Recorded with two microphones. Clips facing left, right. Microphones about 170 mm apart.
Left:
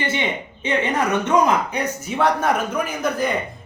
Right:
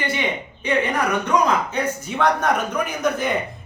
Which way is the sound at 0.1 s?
25° left (ahead or behind).